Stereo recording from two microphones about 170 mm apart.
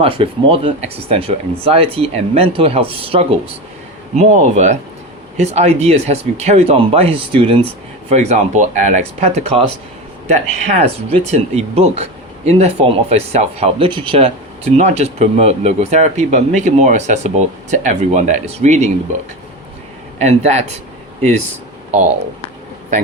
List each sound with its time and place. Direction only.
0.0 s speech: 35° right (ahead or behind)
4.1 s speech: 45° right (ahead or behind)
20.1 s speech: 40° right (ahead or behind)